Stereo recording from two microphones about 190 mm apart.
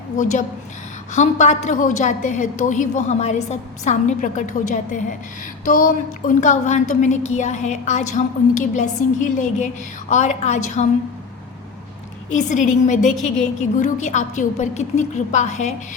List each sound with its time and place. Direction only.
0.2 s a woman's voice: 40° left (ahead or behind)
12.3 s a woman's voice: 40° left (ahead or behind)